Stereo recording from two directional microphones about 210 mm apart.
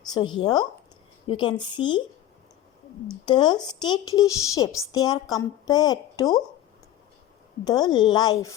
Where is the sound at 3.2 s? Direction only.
20° left (ahead or behind).